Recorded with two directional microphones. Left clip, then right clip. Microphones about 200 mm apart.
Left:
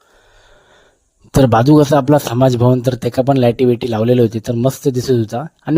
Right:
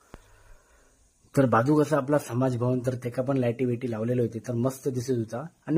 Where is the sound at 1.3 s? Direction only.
45° left (ahead or behind).